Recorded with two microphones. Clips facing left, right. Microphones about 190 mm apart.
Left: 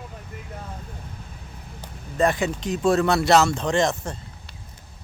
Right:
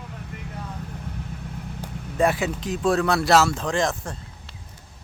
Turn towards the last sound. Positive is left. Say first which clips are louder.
# left 2 dB
turn(degrees=0)  # may be behind; listen again after turning